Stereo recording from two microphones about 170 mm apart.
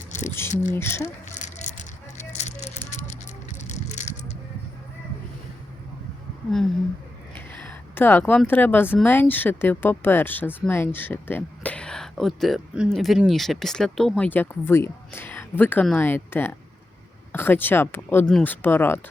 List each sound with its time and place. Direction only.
0.1 s a sound: 45° left (ahead or behind)
0.7 s speech: 15° left (ahead or behind)
1.4 s rattle: 45° left (ahead or behind)
2.9 s music: 45° left (ahead or behind)
3.6 s bicycle: 45° left (ahead or behind)
7.3 s a sound: 10° left (ahead or behind)
9.0 s speech: 10° left (ahead or behind)